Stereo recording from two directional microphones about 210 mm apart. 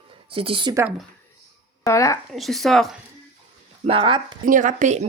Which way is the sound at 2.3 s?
Centre (ahead or behind).